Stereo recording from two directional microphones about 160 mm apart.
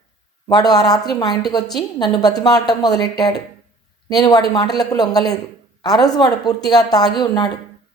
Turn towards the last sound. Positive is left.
turn(degrees=25)  # may be behind; listen again after turning